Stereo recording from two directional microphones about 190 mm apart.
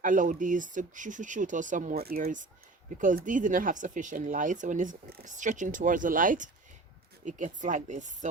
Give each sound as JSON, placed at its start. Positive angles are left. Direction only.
{"t": 0.0, "sound": "speech", "side_deg": -45}